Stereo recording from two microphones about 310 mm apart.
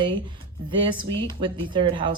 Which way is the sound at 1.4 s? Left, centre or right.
Centre.